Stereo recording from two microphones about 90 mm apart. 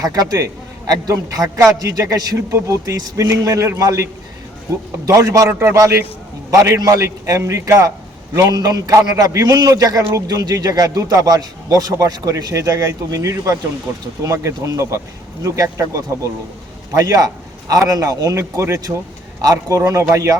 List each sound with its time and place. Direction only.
0.0 s a man's voice: 40° right (ahead or behind)
5.5 s a man's voice: 25° right (ahead or behind)